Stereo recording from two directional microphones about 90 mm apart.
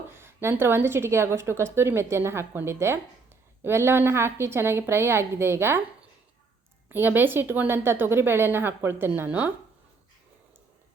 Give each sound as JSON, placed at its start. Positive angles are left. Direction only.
{"t": 0.1, "sound": "a woman's voice", "side_deg": -25}
{"t": 6.8, "sound": "a woman's voice", "side_deg": -25}